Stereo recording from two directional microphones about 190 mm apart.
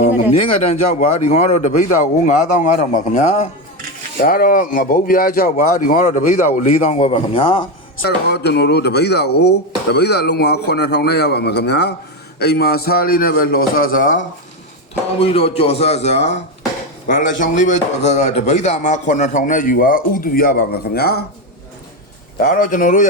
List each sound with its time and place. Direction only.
0.0 s speech: 35° left (ahead or behind)
4.2 s speech: 45° left (ahead or behind); by 7.6 s 30° left (ahead or behind)
8.0 s speech: 60° left (ahead or behind); by 14.3 s 45° left (ahead or behind)
15.2 s speech: 30° left (ahead or behind); by 21.2 s 55° left (ahead or behind)
22.4 s speech: 45° left (ahead or behind)